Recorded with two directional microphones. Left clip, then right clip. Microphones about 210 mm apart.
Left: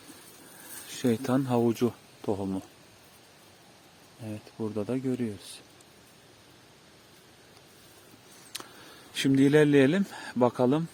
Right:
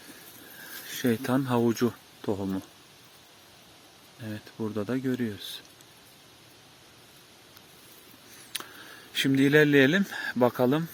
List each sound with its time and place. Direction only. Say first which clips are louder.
0.9 s speech: even; 10° left (ahead or behind)
4.3 s speech: right 1 dB; 5° right (ahead or behind)
8.5 s speech: right 4 dB; 15° left (ahead or behind)